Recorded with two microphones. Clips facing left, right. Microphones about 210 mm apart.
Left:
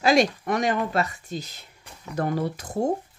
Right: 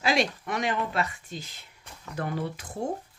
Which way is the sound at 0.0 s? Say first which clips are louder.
Left 6 dB; 45° left (ahead or behind).